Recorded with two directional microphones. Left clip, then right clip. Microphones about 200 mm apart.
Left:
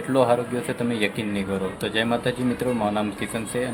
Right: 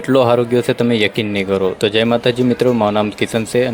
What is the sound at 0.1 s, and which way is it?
Speech, 40° right (ahead or behind).